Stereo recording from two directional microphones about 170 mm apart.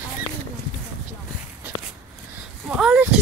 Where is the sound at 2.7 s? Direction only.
5° right (ahead or behind).